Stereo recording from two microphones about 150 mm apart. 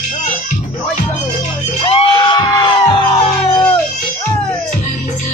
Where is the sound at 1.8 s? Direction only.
35° left (ahead or behind).